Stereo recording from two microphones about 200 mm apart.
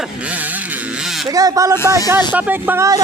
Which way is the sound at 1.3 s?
15° right (ahead or behind).